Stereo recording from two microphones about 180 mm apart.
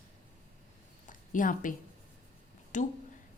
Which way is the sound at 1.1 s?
45° left (ahead or behind).